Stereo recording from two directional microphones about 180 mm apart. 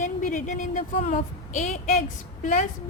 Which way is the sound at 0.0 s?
45° left (ahead or behind).